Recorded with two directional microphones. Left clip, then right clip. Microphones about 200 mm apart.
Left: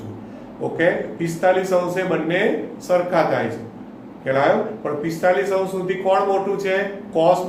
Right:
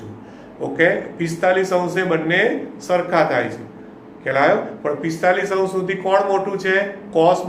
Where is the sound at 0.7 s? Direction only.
25° right (ahead or behind).